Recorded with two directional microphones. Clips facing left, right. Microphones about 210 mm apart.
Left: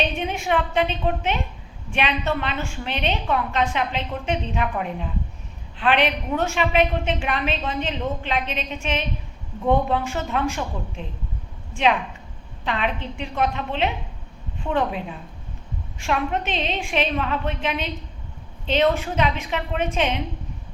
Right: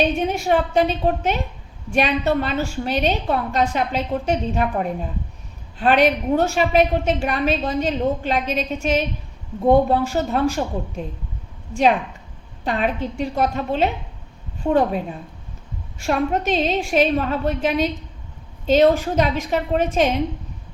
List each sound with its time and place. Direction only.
0.0 s a woman's voice: 40° right (ahead or behind)